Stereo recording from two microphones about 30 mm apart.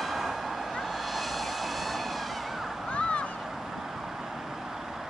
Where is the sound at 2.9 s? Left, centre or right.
Left.